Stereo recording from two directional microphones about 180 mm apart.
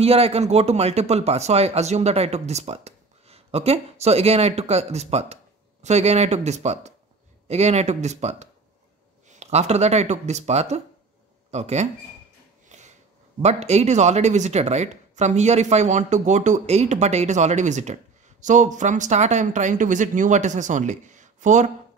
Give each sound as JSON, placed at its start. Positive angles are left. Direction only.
{"t": 0.0, "sound": "speech", "side_deg": -35}
{"t": 12.6, "sound": "a sound", "side_deg": -40}
{"t": 13.4, "sound": "speech", "side_deg": -40}